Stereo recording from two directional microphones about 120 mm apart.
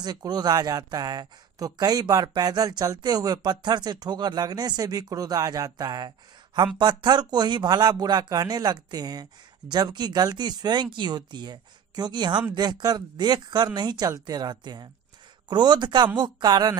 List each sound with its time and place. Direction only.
0.0 s speech: 35° right (ahead or behind)